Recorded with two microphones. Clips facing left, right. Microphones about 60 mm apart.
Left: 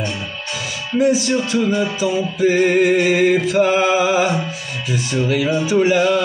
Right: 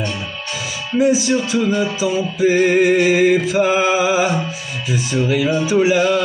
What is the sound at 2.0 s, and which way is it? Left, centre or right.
A man's voice, centre.